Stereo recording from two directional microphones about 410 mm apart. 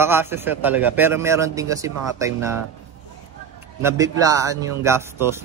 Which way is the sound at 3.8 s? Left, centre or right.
Centre.